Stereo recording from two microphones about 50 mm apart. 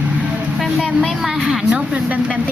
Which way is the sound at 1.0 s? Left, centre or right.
Centre.